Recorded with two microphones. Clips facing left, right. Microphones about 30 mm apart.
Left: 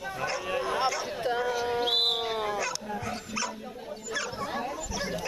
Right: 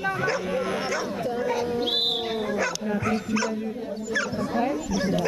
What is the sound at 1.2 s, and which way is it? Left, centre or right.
Speech, left.